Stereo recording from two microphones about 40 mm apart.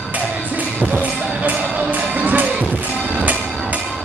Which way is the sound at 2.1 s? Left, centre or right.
Right.